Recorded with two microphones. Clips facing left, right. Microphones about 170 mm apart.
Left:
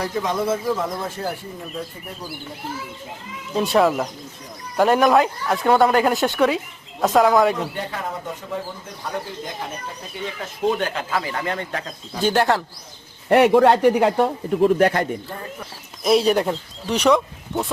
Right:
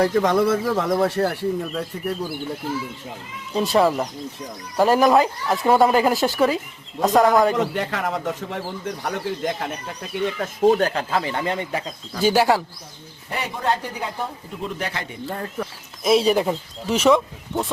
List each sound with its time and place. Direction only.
0.0 s speech: 55° right (ahead or behind); by 1.5 s 75° right (ahead or behind)
3.5 s speech: centre (ahead or behind)
7.7 s speech: 90° right
10.2 s speech: 55° right (ahead or behind); by 12.6 s 5° right (ahead or behind)
13.3 s speech: 65° left (ahead or behind)
16.0 s speech: centre (ahead or behind)